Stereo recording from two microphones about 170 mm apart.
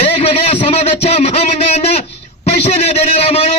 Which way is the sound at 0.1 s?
35° left (ahead or behind).